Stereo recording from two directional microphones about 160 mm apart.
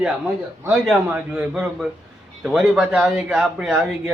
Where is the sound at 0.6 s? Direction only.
15° right (ahead or behind).